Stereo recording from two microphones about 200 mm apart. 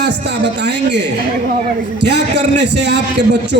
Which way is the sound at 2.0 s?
60° right (ahead or behind).